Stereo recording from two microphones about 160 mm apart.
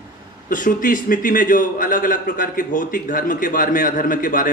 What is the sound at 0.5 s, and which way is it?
A man's voice, 60° left (ahead or behind).